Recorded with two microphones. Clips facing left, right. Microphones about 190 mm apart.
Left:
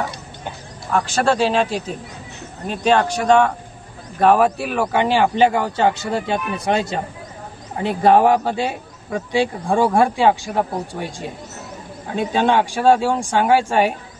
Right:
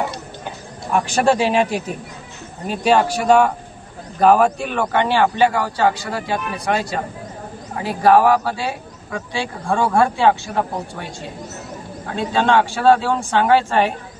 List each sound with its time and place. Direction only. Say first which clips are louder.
0.9 s a man's voice: right 1 dB; 15° right (ahead or behind); by 13.9 s 10° left (ahead or behind)